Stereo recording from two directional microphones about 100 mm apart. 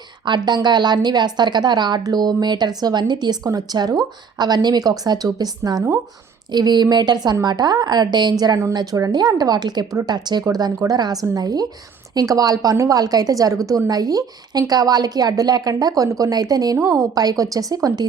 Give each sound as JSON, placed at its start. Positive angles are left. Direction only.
{"t": 0.3, "sound": "a woman's voice", "side_deg": -45}